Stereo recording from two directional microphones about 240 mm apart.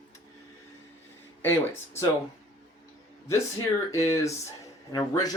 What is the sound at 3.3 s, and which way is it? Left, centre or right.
Speech, centre.